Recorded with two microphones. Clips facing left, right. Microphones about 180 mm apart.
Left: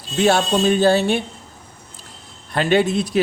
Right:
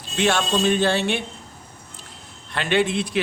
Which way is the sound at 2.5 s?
40° left (ahead or behind).